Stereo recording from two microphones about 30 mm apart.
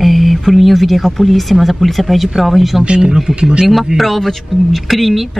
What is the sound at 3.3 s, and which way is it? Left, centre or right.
Speech, right.